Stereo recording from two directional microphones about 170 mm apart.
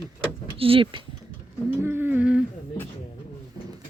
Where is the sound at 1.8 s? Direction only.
10° right (ahead or behind).